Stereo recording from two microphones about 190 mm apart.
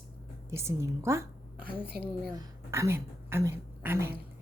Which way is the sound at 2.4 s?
15° right (ahead or behind).